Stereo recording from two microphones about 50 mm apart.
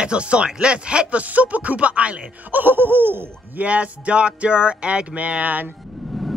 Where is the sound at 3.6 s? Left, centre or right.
Right.